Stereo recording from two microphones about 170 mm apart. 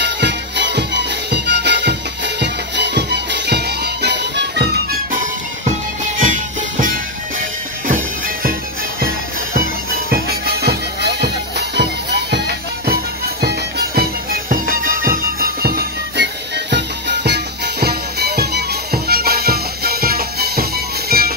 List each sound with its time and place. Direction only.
0.0 s music: 90° right
6.8 s music: 50° right (ahead or behind)